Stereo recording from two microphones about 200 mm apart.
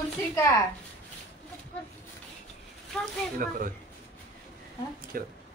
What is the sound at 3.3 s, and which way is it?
Speech, 45° right (ahead or behind).